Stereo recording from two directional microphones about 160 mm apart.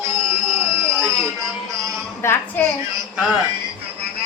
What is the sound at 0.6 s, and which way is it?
Music, 20° right (ahead or behind).